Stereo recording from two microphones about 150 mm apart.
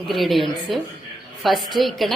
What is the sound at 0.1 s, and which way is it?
A woman's voice, centre (ahead or behind).